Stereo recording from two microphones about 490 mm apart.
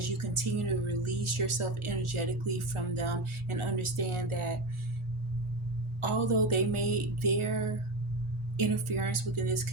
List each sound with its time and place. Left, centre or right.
0.0 s speech: right
6.0 s speech: right
8.5 s speech: right